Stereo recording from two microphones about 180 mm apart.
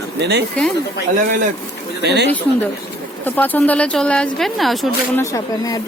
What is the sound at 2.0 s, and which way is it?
Speech, 70° right (ahead or behind).